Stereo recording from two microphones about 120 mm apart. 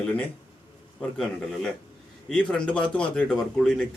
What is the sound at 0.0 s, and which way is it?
A man's voice, 15° left (ahead or behind).